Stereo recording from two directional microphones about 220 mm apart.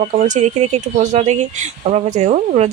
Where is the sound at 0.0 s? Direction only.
30° right (ahead or behind).